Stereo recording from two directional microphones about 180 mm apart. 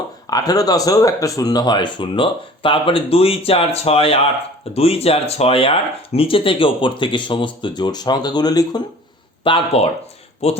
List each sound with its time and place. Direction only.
0.3 s speech: 20° left (ahead or behind)